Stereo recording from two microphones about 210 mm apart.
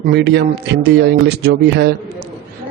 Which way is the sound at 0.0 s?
50° right (ahead or behind).